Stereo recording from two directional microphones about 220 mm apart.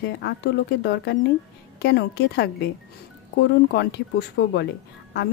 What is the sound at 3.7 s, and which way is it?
Speech, 50° left (ahead or behind).